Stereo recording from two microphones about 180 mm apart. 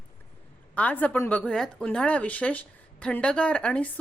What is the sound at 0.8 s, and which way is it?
A woman's voice, 10° left (ahead or behind).